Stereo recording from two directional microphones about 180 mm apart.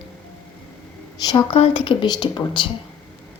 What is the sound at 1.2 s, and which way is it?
Speech, 20° left (ahead or behind).